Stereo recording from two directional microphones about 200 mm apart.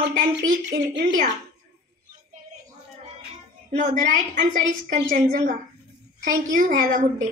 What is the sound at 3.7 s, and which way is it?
A woman's voice, 40° right (ahead or behind).